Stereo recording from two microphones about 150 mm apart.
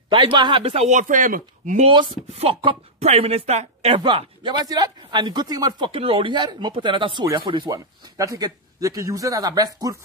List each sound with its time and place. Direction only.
0.1 s speech: 30° right (ahead or behind); by 1.9 s 60° right (ahead or behind)
1.9 s speech: 35° right (ahead or behind)
3.9 s speech: 35° right (ahead or behind)